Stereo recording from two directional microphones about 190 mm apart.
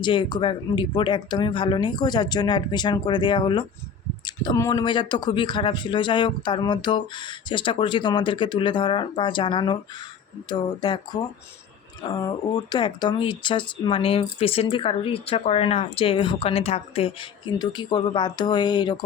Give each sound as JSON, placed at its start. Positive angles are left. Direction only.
{"t": 0.0, "sound": "speech", "side_deg": 25}